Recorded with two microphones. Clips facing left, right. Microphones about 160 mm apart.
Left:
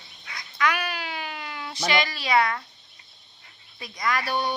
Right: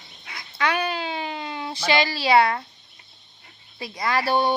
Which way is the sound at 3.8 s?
30° right (ahead or behind).